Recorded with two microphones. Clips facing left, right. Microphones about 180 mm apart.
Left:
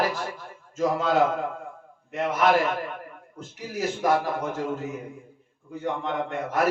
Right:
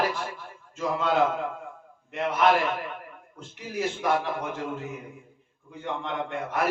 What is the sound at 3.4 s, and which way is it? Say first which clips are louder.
A man's voice: even; 40° left (ahead or behind).